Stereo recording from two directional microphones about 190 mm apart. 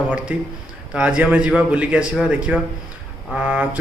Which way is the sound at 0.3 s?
5° right (ahead or behind).